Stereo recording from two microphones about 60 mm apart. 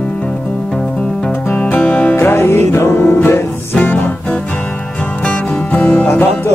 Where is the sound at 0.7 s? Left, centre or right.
Centre.